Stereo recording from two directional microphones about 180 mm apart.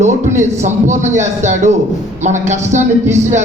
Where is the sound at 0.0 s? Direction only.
40° right (ahead or behind).